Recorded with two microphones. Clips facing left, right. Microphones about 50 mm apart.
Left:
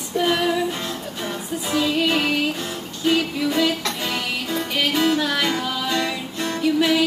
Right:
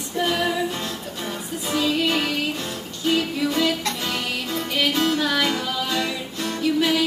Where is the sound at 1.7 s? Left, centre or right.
Centre.